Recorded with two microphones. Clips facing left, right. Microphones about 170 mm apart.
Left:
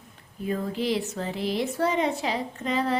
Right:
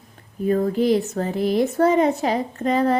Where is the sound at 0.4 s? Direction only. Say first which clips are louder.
Right 9 dB; 45° right (ahead or behind).